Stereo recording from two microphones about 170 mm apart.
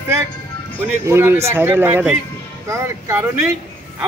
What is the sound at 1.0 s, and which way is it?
A man's voice, 15° right (ahead or behind).